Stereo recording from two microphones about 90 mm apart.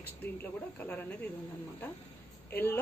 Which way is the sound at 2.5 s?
25° left (ahead or behind).